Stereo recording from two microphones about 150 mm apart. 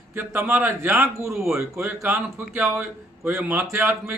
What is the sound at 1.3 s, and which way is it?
Speech, centre (ahead or behind).